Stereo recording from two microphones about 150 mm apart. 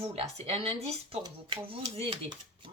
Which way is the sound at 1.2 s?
35° right (ahead or behind).